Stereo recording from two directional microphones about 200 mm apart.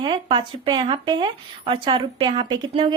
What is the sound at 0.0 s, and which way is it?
A woman's voice, 25° right (ahead or behind).